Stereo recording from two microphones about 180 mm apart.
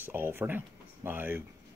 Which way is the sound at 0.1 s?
10° right (ahead or behind).